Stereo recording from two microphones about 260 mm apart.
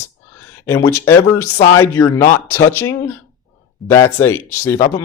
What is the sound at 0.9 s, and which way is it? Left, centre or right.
Speech, centre.